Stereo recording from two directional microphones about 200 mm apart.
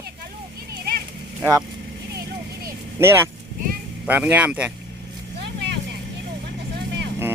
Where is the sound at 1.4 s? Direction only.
15° right (ahead or behind).